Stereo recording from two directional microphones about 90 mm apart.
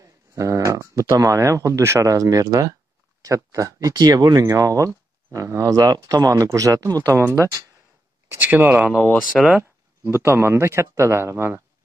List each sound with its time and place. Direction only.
0.0 s speech: 35° right (ahead or behind)
4.5 s speech: 35° right (ahead or behind)
8.4 s speech: 20° right (ahead or behind)
8.9 s speech: 20° left (ahead or behind)
9.3 s speech: 5° right (ahead or behind)
9.6 s speech: 30° right (ahead or behind)